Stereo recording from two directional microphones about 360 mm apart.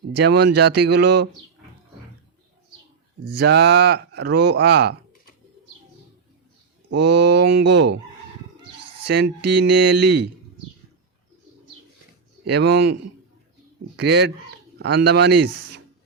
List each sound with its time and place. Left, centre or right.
0.1 s speech: right
0.5 s speech: right
0.9 s speech: right
3.2 s speech: right
6.9 s speech: right
9.0 s speech: right
12.5 s speech: right
15.3 s speech: right